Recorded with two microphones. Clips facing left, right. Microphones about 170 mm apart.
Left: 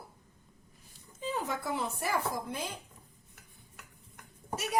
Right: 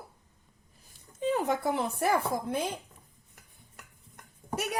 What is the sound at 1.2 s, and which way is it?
Speech, 60° right (ahead or behind).